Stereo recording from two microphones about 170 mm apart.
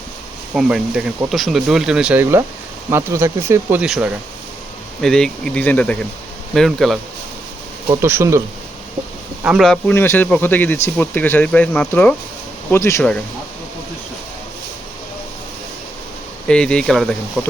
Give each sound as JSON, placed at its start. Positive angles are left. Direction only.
{"t": 0.5, "sound": "speech", "side_deg": -5}
{"t": 7.9, "sound": "speech", "side_deg": -15}
{"t": 9.4, "sound": "speech", "side_deg": -5}
{"t": 13.0, "sound": "speech", "side_deg": 5}
{"t": 16.5, "sound": "speech", "side_deg": 5}